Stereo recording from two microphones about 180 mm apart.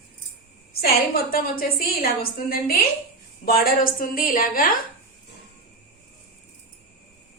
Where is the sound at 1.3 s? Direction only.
55° left (ahead or behind).